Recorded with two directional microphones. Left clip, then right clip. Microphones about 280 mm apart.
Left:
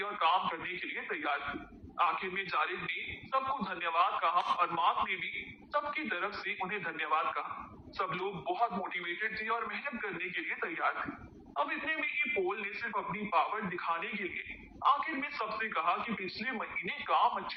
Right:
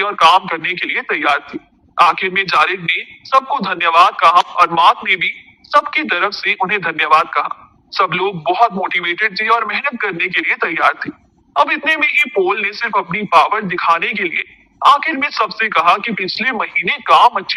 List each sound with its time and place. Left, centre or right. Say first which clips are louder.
0.0 s a man's voice: right 19 dB; right